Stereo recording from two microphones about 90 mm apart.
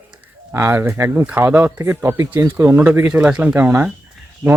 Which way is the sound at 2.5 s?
20° right (ahead or behind).